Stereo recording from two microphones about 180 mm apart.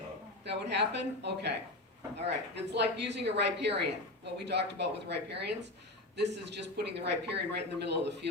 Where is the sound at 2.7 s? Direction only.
70° right (ahead or behind).